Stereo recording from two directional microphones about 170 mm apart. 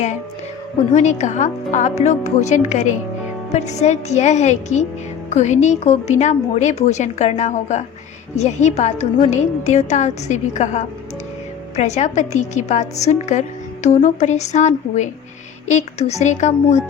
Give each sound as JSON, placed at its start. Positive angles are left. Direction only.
{"t": 0.9, "sound": "speech", "side_deg": 45}